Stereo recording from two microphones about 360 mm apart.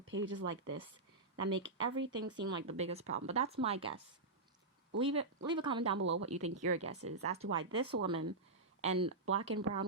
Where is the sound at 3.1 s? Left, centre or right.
Right.